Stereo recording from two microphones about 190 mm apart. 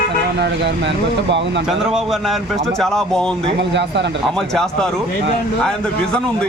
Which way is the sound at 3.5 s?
65° right (ahead or behind).